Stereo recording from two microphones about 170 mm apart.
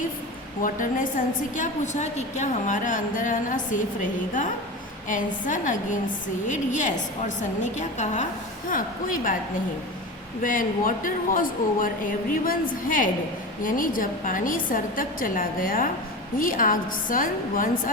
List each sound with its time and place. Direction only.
0.6 s a woman's voice: 50° left (ahead or behind)
5.0 s a woman's voice: 50° left (ahead or behind)
10.4 s a woman's voice: 55° left (ahead or behind)